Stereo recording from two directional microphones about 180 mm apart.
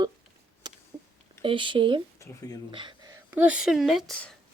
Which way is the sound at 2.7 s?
25° right (ahead or behind).